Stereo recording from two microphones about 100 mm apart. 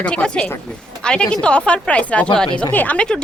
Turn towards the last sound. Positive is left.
turn(degrees=10)  # may be behind; listen again after turning